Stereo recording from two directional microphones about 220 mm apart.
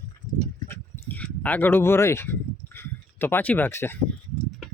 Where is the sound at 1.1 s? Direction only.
5° left (ahead or behind).